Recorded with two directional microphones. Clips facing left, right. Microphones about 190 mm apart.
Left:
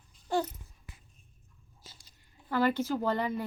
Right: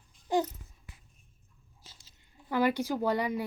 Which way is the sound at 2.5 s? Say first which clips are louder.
Even; 15° right (ahead or behind).